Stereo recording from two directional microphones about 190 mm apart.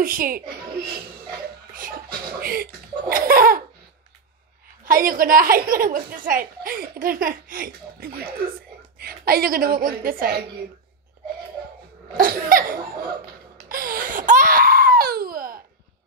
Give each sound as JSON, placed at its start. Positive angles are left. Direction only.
{"t": 0.0, "sound": "a woman's voice", "side_deg": -45}
{"t": 1.7, "sound": "speech", "side_deg": -50}
{"t": 4.8, "sound": "a woman's voice", "side_deg": -45}
{"t": 12.2, "sound": "a woman's voice", "side_deg": -50}
{"t": 13.7, "sound": "baby cry", "side_deg": -50}